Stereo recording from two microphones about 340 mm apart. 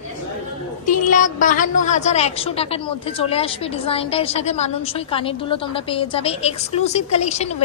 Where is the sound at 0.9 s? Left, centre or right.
Left.